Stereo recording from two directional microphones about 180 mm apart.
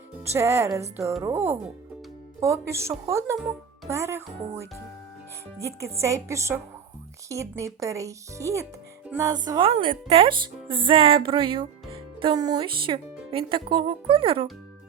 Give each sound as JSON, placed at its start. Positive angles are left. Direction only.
{"t": 0.3, "sound": "speech", "side_deg": -15}